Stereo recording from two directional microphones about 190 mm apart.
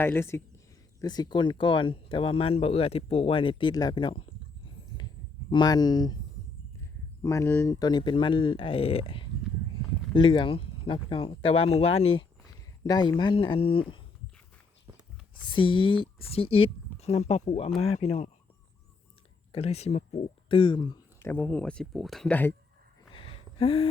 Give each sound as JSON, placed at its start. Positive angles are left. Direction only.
{"t": 0.0, "sound": "speech", "side_deg": 10}
{"t": 5.5, "sound": "speech", "side_deg": 20}
{"t": 7.2, "sound": "speech", "side_deg": 15}
{"t": 15.4, "sound": "speech", "side_deg": 25}
{"t": 19.5, "sound": "speech", "side_deg": 35}
{"t": 23.1, "sound": "a sound", "side_deg": 30}